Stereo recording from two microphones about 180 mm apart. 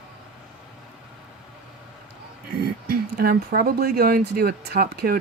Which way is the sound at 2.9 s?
55° right (ahead or behind).